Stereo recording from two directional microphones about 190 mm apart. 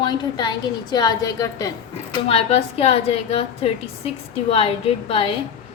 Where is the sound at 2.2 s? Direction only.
30° left (ahead or behind).